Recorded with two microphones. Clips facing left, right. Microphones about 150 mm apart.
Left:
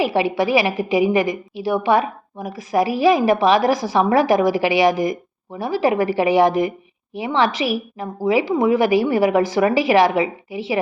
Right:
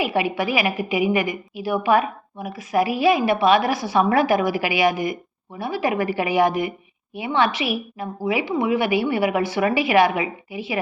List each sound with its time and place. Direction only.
0.0 s a woman's voice: 30° left (ahead or behind)